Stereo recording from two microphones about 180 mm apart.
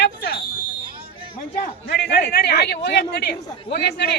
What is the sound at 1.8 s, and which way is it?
A man's voice, 65° left (ahead or behind).